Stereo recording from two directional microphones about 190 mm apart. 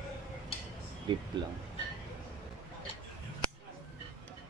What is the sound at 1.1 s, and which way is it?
Speech, 25° right (ahead or behind).